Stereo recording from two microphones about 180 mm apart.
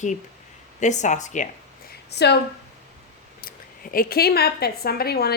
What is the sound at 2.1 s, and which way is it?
Speech, 65° left (ahead or behind).